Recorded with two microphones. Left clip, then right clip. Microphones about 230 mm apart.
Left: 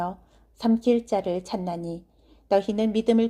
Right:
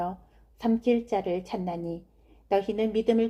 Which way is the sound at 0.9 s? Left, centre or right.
Left.